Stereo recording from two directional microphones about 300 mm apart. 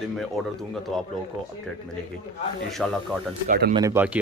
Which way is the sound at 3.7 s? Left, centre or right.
Centre.